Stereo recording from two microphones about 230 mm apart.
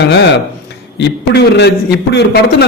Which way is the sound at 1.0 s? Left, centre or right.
Left.